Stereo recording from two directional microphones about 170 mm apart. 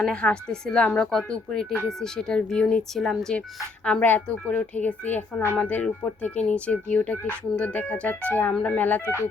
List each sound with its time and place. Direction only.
0.0 s a woman's voice: 5° left (ahead or behind)